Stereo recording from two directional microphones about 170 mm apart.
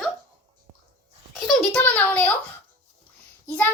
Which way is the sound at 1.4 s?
5° left (ahead or behind).